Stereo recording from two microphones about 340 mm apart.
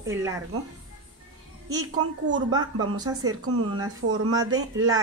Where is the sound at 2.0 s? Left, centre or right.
Right.